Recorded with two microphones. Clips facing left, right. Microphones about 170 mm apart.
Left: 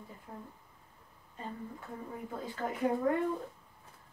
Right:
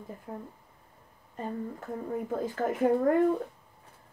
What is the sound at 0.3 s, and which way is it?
Speech, 60° right (ahead or behind).